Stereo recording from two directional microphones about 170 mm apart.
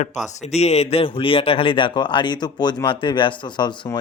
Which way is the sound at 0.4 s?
40° left (ahead or behind).